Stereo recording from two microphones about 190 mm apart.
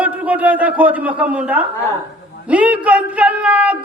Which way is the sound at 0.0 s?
10° right (ahead or behind).